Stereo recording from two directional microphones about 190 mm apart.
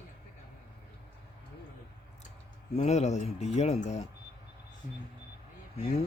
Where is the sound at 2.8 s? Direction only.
35° left (ahead or behind).